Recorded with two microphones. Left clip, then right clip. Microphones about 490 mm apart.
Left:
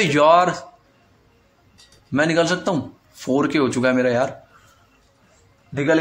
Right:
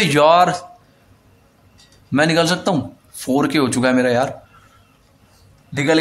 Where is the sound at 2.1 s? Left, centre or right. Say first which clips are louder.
Right 2 dB; right.